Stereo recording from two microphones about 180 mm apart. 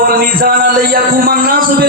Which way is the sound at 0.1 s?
55° right (ahead or behind).